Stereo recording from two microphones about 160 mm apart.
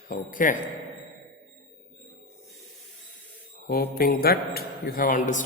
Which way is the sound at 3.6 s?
70° left (ahead or behind).